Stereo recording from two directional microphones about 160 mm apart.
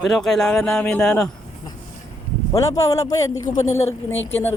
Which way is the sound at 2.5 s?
20° left (ahead or behind).